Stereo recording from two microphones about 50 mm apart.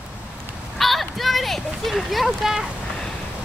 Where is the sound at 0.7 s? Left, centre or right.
Centre.